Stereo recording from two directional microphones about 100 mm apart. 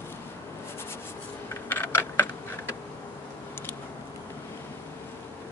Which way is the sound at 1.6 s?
20° left (ahead or behind).